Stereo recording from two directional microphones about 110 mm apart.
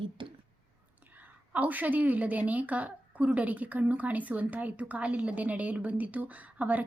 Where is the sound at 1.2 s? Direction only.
15° right (ahead or behind).